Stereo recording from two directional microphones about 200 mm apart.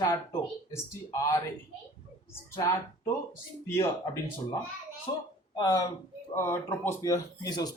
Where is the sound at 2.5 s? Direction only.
15° left (ahead or behind).